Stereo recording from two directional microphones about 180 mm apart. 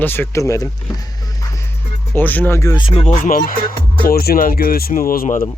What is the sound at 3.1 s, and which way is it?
Music, 50° left (ahead or behind).